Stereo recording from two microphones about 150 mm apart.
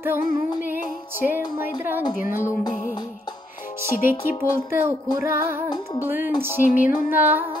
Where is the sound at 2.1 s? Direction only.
65° left (ahead or behind).